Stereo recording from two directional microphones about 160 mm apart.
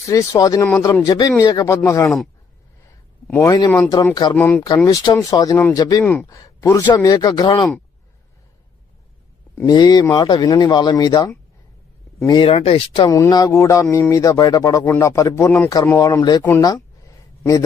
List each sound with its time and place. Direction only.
0.1 s speech: 20° left (ahead or behind)
3.2 s speech: 15° left (ahead or behind)
4.1 s speech: 25° left (ahead or behind)
4.4 s speech: 10° left (ahead or behind); by 7.7 s 25° left (ahead or behind)
9.6 s speech: 25° left (ahead or behind)
13.1 s speech: 20° left (ahead or behind)